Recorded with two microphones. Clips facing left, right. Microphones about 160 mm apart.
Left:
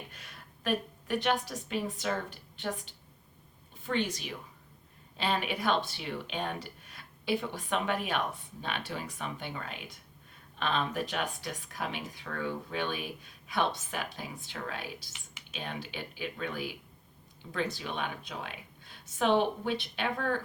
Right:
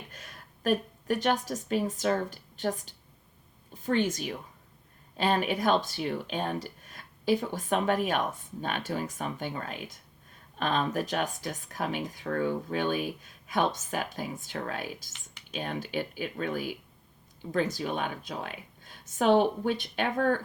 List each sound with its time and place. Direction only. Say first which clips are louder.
0.1 s a woman's voice: right 3 dB; 45° right (ahead or behind)